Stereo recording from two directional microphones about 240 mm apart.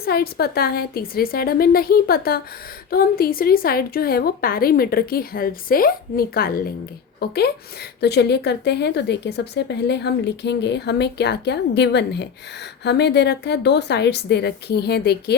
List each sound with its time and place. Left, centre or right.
0.0 s a woman's voice: left